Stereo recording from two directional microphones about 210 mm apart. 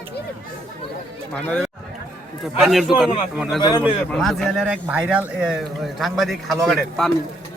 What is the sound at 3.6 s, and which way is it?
Speech, 20° left (ahead or behind).